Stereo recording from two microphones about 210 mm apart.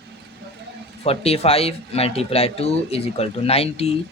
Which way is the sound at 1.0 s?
30° left (ahead or behind).